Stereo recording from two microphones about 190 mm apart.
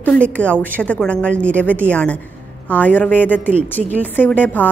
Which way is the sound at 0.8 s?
5° left (ahead or behind).